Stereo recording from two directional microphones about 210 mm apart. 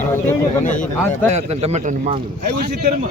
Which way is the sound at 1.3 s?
30° right (ahead or behind).